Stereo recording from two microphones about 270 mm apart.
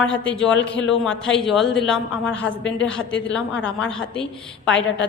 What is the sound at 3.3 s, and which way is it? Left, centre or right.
A woman's voice, centre.